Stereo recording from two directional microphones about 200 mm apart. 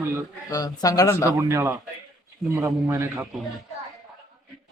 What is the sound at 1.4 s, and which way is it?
A man's voice, 15° right (ahead or behind).